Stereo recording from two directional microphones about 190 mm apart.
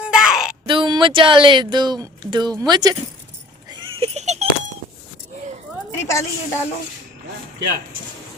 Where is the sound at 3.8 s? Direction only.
35° right (ahead or behind).